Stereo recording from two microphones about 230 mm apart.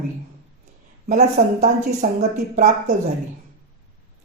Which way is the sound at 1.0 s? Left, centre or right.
Right.